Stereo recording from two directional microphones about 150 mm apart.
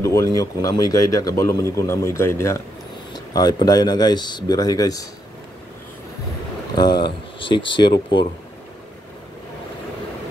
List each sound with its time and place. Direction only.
0.0 s speech: 20° left (ahead or behind)
6.7 s speech: 30° left (ahead or behind)